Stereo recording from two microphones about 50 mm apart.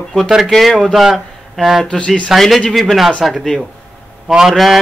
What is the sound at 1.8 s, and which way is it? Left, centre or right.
Speech, left.